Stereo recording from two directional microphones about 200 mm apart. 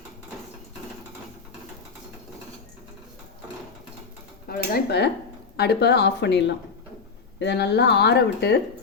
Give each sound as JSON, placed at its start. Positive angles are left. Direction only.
{"t": 4.4, "sound": "speech", "side_deg": 50}